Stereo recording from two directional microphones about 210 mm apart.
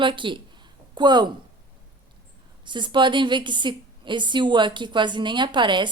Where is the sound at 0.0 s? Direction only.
25° right (ahead or behind).